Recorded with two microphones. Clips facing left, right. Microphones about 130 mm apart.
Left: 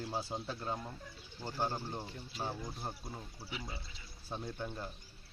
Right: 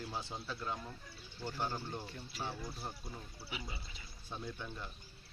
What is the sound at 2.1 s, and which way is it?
Speech, 25° left (ahead or behind).